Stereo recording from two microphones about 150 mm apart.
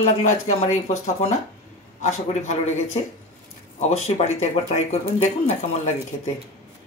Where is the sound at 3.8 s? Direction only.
45° left (ahead or behind).